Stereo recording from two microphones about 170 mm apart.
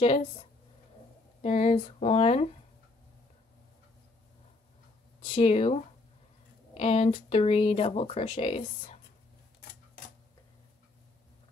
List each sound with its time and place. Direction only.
1.4 s speech: 40° left (ahead or behind)
5.2 s speech: 35° left (ahead or behind)